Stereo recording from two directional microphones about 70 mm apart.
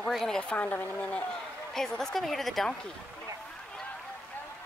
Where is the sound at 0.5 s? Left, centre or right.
Left.